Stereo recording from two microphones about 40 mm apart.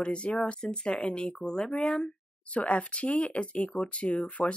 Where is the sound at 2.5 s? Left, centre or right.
Left.